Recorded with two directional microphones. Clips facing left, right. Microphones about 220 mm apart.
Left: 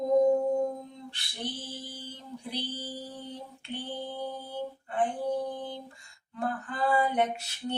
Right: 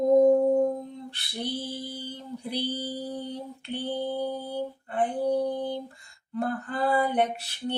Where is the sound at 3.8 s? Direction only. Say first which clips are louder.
Right 7 dB; 35° right (ahead or behind).